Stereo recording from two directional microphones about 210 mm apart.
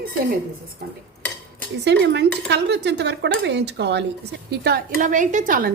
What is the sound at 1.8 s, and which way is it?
Speech, 55° right (ahead or behind).